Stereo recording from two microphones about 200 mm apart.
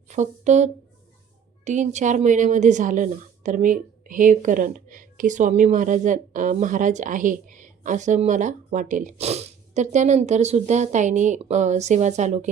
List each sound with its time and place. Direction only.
0.1 s speech: 35° right (ahead or behind)